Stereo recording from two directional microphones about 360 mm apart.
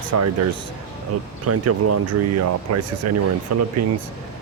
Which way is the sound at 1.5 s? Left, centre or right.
Right.